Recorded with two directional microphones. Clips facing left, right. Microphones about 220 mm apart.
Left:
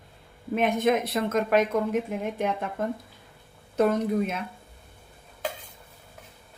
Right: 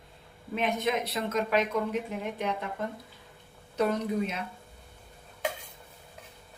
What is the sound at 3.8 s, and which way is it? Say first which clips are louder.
Speech: left 5 dB; 50° left (ahead or behind).